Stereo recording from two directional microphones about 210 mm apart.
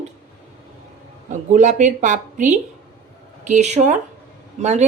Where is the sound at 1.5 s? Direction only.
35° right (ahead or behind).